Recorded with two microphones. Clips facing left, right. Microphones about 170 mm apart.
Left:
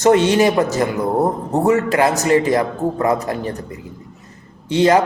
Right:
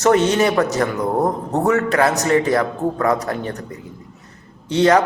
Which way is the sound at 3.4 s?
30° left (ahead or behind).